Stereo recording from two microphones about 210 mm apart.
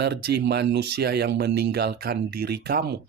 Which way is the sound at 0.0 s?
50° right (ahead or behind).